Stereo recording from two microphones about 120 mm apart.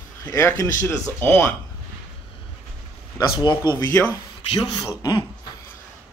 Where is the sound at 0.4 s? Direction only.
20° left (ahead or behind).